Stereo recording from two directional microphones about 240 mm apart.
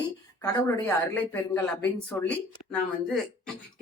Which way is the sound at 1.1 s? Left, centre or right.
Centre.